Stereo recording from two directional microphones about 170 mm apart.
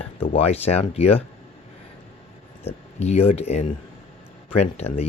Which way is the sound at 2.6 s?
40° left (ahead or behind).